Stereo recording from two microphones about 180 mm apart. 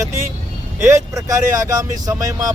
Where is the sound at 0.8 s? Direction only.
15° right (ahead or behind).